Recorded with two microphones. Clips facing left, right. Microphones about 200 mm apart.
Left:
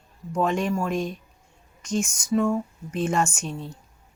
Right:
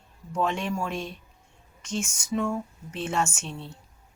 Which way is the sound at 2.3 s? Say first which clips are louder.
Left 5 dB; 5° left (ahead or behind).